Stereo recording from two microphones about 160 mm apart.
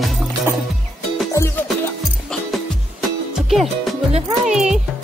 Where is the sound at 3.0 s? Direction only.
Centre (ahead or behind).